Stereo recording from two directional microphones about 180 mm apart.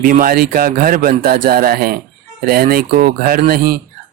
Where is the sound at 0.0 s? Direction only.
50° right (ahead or behind).